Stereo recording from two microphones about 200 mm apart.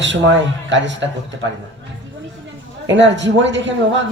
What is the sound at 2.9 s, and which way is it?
Speech, 65° right (ahead or behind).